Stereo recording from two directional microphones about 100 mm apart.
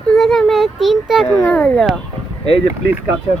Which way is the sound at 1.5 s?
5° left (ahead or behind).